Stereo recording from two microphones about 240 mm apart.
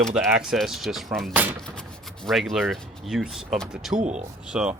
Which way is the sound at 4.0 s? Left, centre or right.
Right.